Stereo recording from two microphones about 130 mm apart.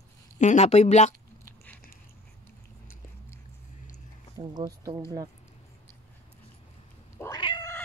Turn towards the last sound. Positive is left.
turn(degrees=35)  # may be behind; listen again after turning